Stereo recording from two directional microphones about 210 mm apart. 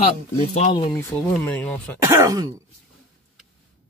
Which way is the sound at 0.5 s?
30° left (ahead or behind).